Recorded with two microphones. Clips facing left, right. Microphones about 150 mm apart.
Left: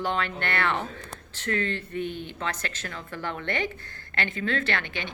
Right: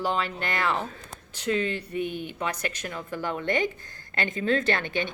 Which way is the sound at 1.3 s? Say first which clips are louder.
Right 2 dB; 15° right (ahead or behind).